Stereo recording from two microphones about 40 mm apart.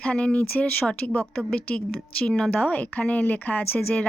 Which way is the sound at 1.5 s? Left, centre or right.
Left.